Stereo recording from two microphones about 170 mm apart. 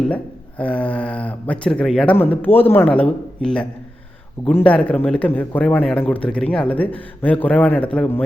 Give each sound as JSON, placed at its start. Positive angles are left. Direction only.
{"t": 0.6, "sound": "a man's voice", "side_deg": 5}